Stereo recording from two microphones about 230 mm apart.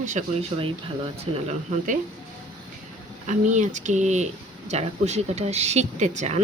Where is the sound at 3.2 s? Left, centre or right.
Right.